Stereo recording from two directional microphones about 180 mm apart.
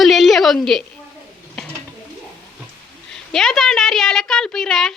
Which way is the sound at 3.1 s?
Centre (ahead or behind).